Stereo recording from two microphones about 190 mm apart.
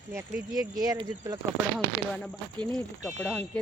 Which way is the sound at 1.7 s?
5° left (ahead or behind).